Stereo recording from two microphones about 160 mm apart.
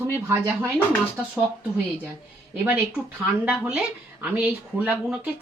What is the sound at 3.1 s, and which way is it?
Speech, 10° right (ahead or behind).